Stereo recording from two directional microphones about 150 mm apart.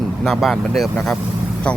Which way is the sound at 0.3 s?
Centre (ahead or behind).